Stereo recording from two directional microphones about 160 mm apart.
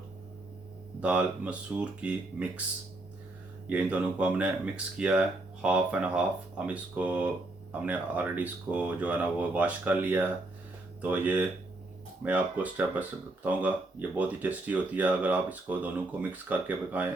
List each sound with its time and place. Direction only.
1.0 s speech: 5° right (ahead or behind)
3.7 s speech: 10° right (ahead or behind)